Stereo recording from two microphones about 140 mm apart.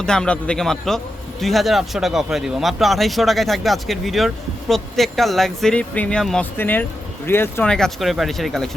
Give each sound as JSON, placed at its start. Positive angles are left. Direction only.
{"t": 0.0, "sound": "a man's voice", "side_deg": 5}
{"t": 7.7, "sound": "a man's voice", "side_deg": 5}